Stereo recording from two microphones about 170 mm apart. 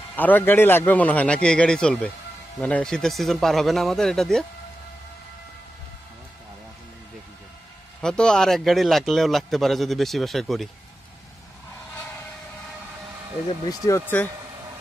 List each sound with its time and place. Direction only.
0.1 s a man's voice: 10° left (ahead or behind)
8.0 s a man's voice: 5° left (ahead or behind)
13.7 s speech: 20° left (ahead or behind)